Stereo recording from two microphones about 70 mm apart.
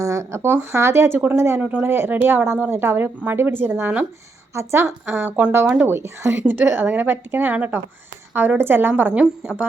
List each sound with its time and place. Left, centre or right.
0.0 s speech: right
1.6 s a woman's voice: right
4.5 s speech: right
5.1 s a woman's voice: right
9.2 s a woman's voice: centre